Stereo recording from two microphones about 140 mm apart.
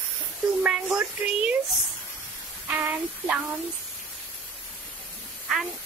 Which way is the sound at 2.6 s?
10° right (ahead or behind).